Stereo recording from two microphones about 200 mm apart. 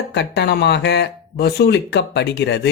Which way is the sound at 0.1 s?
55° left (ahead or behind).